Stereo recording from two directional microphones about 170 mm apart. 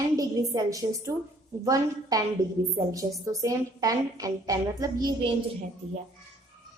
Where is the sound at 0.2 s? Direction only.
20° right (ahead or behind).